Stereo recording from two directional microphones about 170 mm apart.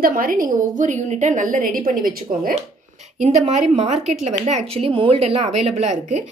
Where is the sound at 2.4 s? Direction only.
45° right (ahead or behind).